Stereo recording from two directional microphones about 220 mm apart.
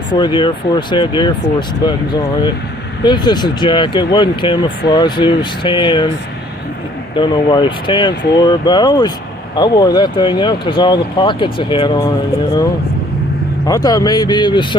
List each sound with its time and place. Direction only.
0.1 s speech: 20° left (ahead or behind)
3.0 s speech: 20° left (ahead or behind)
7.2 s speech: 20° left (ahead or behind)
13.7 s speech: 15° left (ahead or behind)